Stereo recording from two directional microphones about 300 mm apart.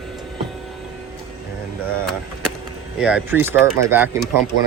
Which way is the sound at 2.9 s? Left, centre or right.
Centre.